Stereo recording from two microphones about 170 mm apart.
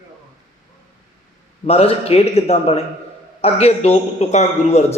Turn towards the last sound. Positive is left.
turn(degrees=40)  # may be behind; listen again after turning